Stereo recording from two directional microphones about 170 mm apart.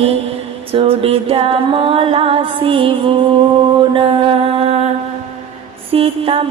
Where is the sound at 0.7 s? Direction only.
35° right (ahead or behind).